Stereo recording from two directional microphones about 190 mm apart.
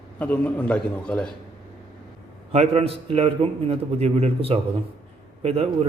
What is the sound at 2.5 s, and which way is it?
A man's voice, 35° right (ahead or behind).